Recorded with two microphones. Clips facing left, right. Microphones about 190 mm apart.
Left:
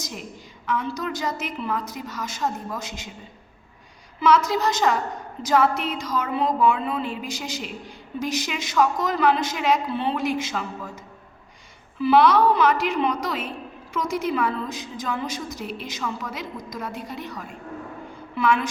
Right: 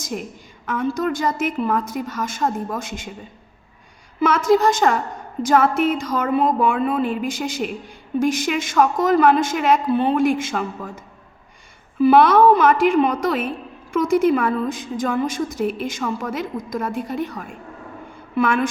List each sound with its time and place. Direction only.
0.6 s a woman's voice: 50° right (ahead or behind)
4.2 s a woman's voice: 50° right (ahead or behind)